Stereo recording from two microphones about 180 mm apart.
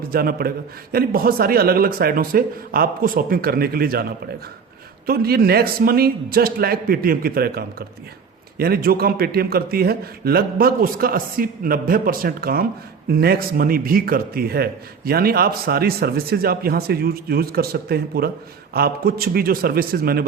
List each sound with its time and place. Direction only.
0.1 s speech: 55° right (ahead or behind)
5.0 s speech: 60° right (ahead or behind)